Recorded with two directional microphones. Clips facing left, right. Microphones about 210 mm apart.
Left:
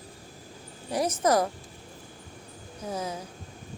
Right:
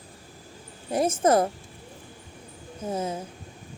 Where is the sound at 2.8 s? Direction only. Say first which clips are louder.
Right 4 dB; 25° right (ahead or behind).